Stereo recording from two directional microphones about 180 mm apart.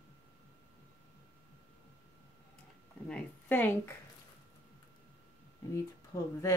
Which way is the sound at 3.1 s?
10° left (ahead or behind).